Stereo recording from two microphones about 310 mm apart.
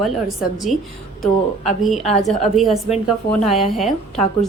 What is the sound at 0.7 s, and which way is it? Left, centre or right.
Speech, left.